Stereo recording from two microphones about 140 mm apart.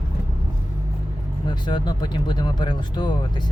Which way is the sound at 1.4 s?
35° left (ahead or behind).